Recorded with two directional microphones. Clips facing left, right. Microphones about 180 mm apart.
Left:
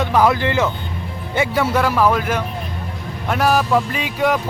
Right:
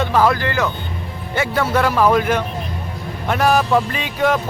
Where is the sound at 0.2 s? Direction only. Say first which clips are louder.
Left 1 dB; 20° left (ahead or behind).